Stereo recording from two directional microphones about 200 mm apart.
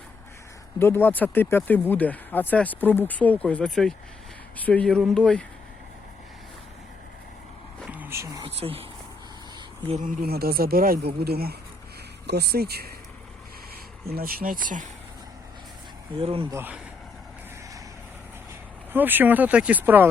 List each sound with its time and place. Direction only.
0.8 s speech: 10° left (ahead or behind)
7.8 s vehicle: 5° right (ahead or behind)
8.4 s speech: 30° right (ahead or behind)
9.9 s speech: 40° right (ahead or behind)
14.1 s speech: 45° right (ahead or behind)
16.2 s speech: 30° right (ahead or behind)
16.5 s speech: 10° right (ahead or behind)
18.9 s speech: 10° right (ahead or behind)